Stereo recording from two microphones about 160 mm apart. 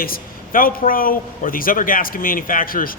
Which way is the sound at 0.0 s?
65° left (ahead or behind).